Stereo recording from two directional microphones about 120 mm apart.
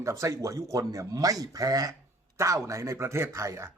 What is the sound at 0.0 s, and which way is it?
A man's voice, 25° right (ahead or behind).